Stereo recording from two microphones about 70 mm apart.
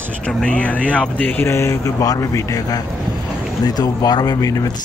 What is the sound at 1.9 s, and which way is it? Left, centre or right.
Speech, left.